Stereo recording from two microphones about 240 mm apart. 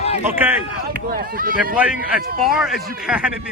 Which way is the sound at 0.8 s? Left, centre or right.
Right.